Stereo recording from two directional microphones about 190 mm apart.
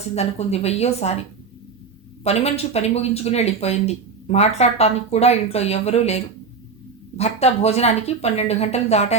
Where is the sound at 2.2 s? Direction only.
35° left (ahead or behind).